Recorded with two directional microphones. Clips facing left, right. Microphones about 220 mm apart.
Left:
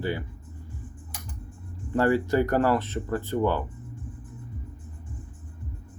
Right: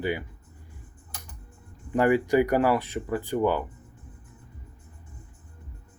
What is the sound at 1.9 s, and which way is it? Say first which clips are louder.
Speech: right 1 dB; 15° right (ahead or behind).